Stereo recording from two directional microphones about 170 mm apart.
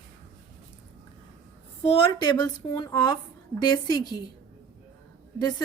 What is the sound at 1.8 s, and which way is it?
Speech, 35° left (ahead or behind).